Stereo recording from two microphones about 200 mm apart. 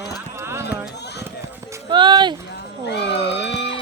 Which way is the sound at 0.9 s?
55° left (ahead or behind).